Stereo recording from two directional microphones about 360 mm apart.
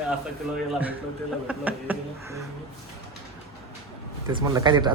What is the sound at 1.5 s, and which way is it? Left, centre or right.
Speech, centre.